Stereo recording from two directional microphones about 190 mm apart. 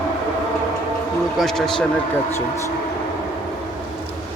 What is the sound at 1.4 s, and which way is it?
Speech, centre (ahead or behind).